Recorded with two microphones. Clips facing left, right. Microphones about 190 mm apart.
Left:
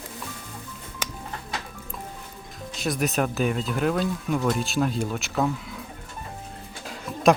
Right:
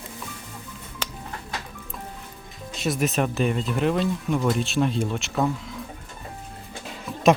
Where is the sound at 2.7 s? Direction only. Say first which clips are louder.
Right 1 dB; centre (ahead or behind).